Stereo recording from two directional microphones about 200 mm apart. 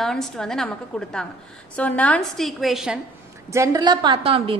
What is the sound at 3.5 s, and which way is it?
A woman's voice, 15° right (ahead or behind).